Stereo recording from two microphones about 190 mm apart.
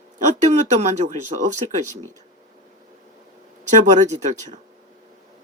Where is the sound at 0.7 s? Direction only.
35° right (ahead or behind).